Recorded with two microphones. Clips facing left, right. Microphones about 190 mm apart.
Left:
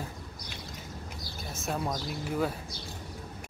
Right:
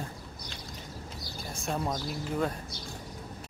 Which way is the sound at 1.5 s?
Centre (ahead or behind).